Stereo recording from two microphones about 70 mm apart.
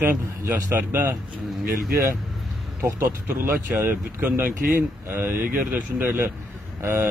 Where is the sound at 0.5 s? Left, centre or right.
Right.